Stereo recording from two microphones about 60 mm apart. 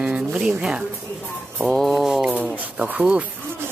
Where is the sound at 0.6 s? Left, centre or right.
Centre.